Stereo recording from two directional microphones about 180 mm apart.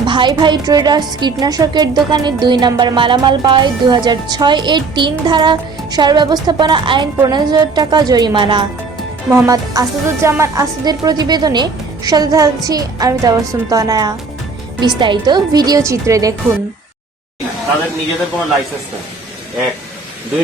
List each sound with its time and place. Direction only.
0.0 s a woman's voice: 25° right (ahead or behind)